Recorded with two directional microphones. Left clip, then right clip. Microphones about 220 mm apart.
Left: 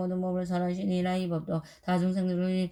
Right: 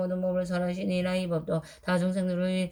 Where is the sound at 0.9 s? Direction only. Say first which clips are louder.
Right 3 dB; 15° right (ahead or behind).